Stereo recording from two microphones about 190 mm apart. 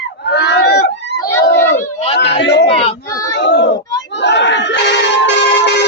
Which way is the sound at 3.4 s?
70° left (ahead or behind).